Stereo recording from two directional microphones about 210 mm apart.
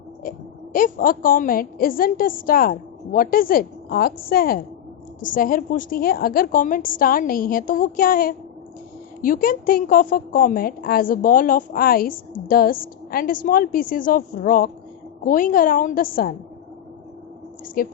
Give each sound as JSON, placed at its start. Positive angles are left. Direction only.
{"t": 0.2, "sound": "a woman's voice", "side_deg": 40}
{"t": 17.8, "sound": "a woman's voice", "side_deg": 40}